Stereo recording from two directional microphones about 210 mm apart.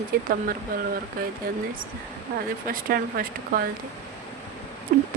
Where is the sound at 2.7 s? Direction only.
45° right (ahead or behind).